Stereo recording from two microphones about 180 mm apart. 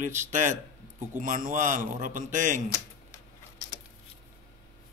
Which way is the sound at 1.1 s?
50° right (ahead or behind).